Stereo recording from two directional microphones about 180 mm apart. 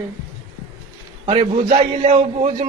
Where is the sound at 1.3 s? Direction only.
35° right (ahead or behind).